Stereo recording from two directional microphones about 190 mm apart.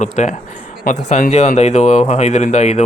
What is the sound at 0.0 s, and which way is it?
Speech, 40° left (ahead or behind).